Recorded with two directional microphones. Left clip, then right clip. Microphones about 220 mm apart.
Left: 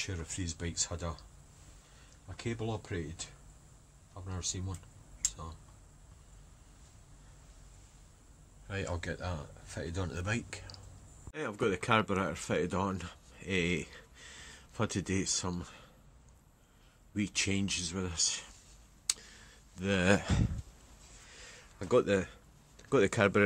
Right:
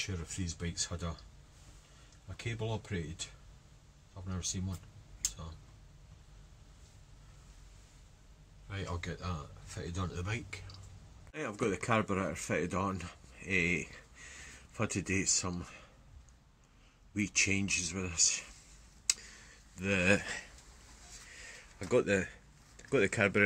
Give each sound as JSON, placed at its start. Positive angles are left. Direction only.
{"t": 0.0, "sound": "speech", "side_deg": 40}
{"t": 2.5, "sound": "speech", "side_deg": 30}
{"t": 4.3, "sound": "speech", "side_deg": 30}
{"t": 8.6, "sound": "speech", "side_deg": 50}
{"t": 11.3, "sound": "speech", "side_deg": 10}
{"t": 17.4, "sound": "speech", "side_deg": 10}
{"t": 19.8, "sound": "speech", "side_deg": 15}
{"t": 21.5, "sound": "a sound", "side_deg": 10}
{"t": 22.8, "sound": "speech", "side_deg": 15}